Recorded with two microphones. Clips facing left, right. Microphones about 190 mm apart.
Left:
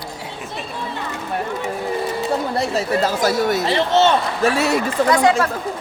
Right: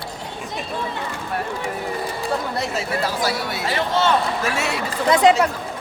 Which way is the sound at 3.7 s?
25° left (ahead or behind).